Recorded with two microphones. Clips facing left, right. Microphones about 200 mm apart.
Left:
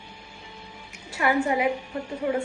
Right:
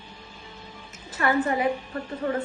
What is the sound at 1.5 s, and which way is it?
Speech, 15° left (ahead or behind).